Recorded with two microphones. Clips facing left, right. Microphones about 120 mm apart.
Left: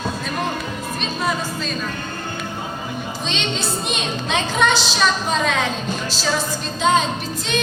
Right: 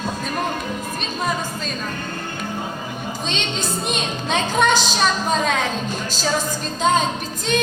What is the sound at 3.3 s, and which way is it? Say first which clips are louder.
Music: left 2 dB; 45° right (ahead or behind).